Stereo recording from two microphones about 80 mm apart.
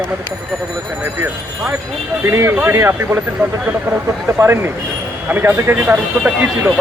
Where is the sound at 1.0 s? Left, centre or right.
Right.